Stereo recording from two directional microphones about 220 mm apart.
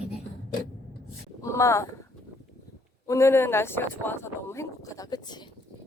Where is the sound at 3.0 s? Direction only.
15° left (ahead or behind).